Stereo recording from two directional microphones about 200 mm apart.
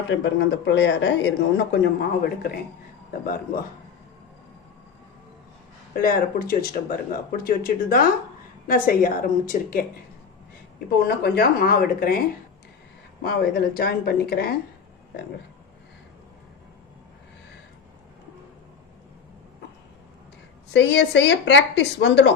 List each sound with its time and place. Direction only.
0.1 s speech: 60° left (ahead or behind)
5.9 s speech: 45° left (ahead or behind)
10.8 s speech: 55° left (ahead or behind)
13.2 s speech: 50° left (ahead or behind)
20.7 s speech: 60° left (ahead or behind)